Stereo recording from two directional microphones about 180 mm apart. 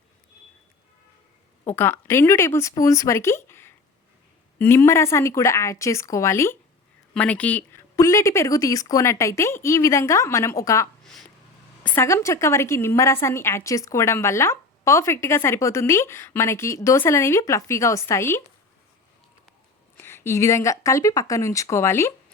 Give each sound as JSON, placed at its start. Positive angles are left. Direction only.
{"t": 1.6, "sound": "a woman's voice", "side_deg": 10}
{"t": 11.0, "sound": "a sound", "side_deg": 0}
{"t": 11.8, "sound": "a woman's voice", "side_deg": 15}
{"t": 20.0, "sound": "a woman's voice", "side_deg": 15}